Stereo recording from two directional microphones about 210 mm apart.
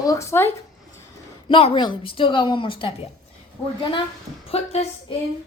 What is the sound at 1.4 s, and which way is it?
A woman's voice, 25° left (ahead or behind).